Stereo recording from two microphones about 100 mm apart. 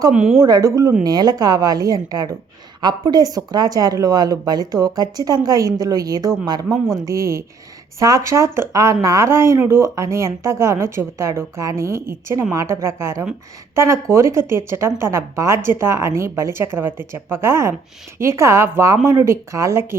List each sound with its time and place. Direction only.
0.1 s a woman's voice: 10° right (ahead or behind)
0.3 s speech: 40° right (ahead or behind)